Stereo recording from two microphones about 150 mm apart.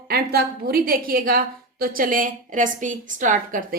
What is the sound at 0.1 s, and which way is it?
A woman's voice, 90° right.